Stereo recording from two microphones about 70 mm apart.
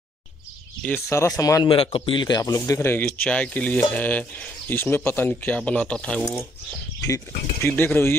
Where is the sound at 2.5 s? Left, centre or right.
Left.